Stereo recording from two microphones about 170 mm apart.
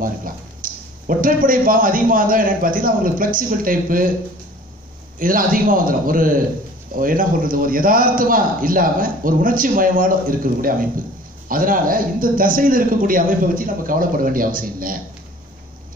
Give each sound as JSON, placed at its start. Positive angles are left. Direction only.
{"t": 0.0, "sound": "a man's voice", "side_deg": -55}
{"t": 5.2, "sound": "a man's voice", "side_deg": -55}